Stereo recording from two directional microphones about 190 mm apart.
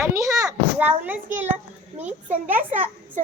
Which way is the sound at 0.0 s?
15° right (ahead or behind).